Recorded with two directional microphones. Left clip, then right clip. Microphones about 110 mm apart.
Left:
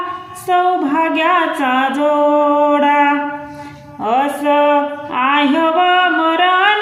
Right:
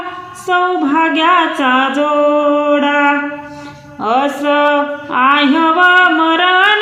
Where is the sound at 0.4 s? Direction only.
25° right (ahead or behind).